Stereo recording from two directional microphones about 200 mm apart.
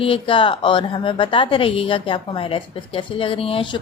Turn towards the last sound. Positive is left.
turn(degrees=25)  # may be behind; listen again after turning